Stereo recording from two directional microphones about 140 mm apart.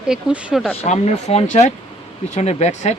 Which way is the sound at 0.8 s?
50° left (ahead or behind).